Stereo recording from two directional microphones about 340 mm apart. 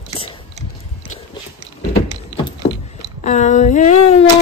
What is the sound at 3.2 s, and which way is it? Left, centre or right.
Speech, left.